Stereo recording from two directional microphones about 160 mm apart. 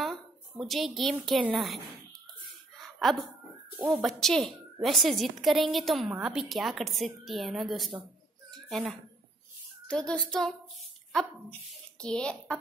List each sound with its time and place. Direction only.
0.0 s a sound: centre (ahead or behind)
1.2 s a woman's voice: centre (ahead or behind)
3.0 s speech: centre (ahead or behind)
3.7 s speech: 15° right (ahead or behind)
4.0 s a woman's voice: centre (ahead or behind)
8.5 s a sound: centre (ahead or behind)
9.8 s a woman's voice: 5° left (ahead or behind)
12.0 s a woman's voice: 5° left (ahead or behind)